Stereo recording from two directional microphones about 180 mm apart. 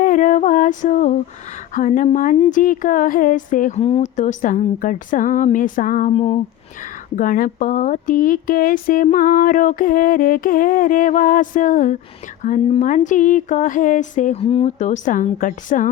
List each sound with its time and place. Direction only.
0.0 s female singing: 50° left (ahead or behind)
1.7 s speech: 45° left (ahead or behind)
7.2 s speech: 50° left (ahead or behind)
14.4 s speech: 35° left (ahead or behind)